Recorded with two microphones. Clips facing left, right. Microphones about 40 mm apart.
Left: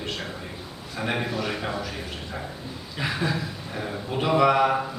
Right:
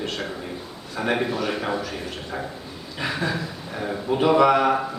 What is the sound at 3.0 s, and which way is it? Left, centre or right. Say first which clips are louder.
A man's voice: right 1 dB; centre.